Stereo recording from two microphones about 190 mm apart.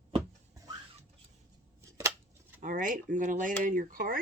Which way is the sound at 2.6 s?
45° right (ahead or behind).